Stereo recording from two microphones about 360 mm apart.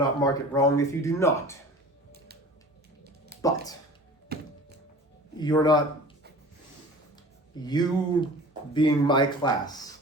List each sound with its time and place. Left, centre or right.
0.2 s speech: centre
2.1 s music: right
3.4 s speech: centre
4.3 s music: right
5.4 s speech: centre
7.6 s speech: centre